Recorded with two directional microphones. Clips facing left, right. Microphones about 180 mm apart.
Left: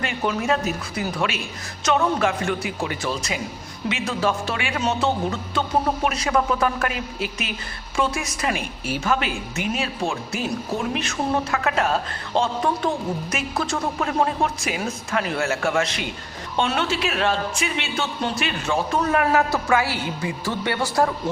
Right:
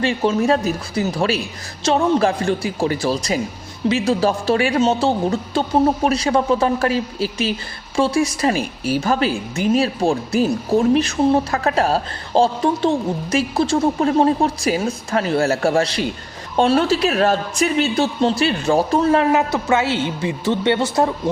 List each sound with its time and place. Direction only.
0.0 s a woman's voice: 30° right (ahead or behind)